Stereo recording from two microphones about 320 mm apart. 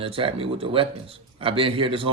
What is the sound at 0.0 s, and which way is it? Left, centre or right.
A man's voice, centre.